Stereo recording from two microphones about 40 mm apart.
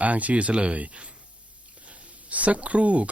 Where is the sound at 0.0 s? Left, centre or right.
Right.